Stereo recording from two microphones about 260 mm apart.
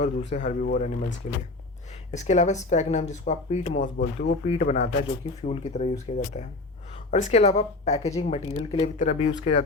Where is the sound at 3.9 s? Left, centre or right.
Left.